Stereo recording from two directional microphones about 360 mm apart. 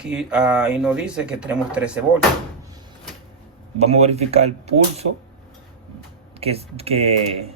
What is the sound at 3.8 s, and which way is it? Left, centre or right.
Speech, centre.